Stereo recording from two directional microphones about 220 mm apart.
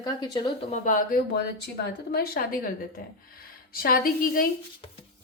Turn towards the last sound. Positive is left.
turn(degrees=40)  # may be behind; listen again after turning